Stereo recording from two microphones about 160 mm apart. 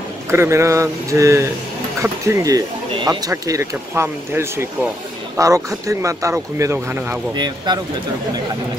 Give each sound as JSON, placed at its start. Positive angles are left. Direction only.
{"t": 0.3, "sound": "speech", "side_deg": -15}
{"t": 7.3, "sound": "speech", "side_deg": -25}